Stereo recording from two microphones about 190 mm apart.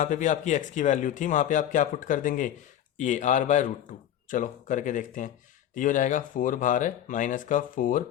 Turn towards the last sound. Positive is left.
turn(degrees=45)  # may be behind; listen again after turning